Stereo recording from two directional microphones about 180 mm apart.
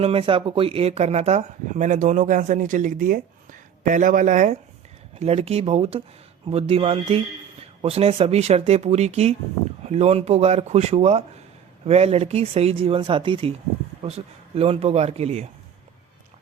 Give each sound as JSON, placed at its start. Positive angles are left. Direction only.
{"t": 0.0, "sound": "speech", "side_deg": -30}